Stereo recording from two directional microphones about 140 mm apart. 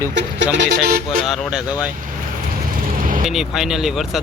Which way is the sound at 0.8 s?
90° right.